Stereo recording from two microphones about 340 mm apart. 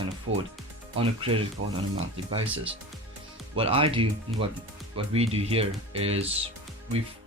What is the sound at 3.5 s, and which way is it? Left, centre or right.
Speech, centre.